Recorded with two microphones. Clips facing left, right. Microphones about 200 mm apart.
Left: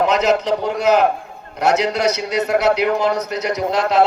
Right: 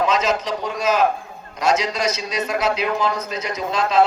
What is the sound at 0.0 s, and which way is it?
A man's voice, 65° left (ahead or behind).